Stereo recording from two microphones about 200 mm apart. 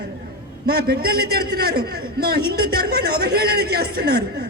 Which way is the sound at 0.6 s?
50° right (ahead or behind).